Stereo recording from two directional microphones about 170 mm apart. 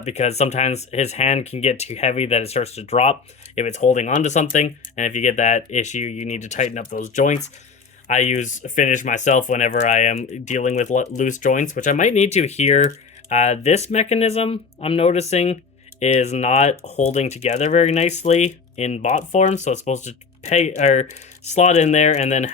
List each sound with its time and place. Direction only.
0.0 s speech: 40° left (ahead or behind)